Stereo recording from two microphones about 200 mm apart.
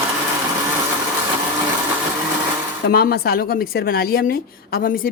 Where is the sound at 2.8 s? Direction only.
50° left (ahead or behind).